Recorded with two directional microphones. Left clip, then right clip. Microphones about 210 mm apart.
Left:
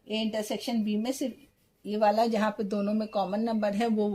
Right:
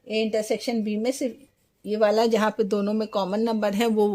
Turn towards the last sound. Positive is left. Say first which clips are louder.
# right 6 dB
turn(degrees=-50)  # may be behind; listen again after turning